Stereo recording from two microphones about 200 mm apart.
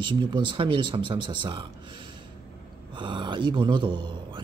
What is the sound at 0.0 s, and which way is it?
Speech, 25° right (ahead or behind).